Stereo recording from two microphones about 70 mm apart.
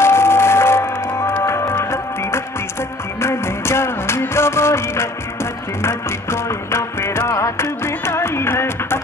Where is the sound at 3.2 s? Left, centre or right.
Left.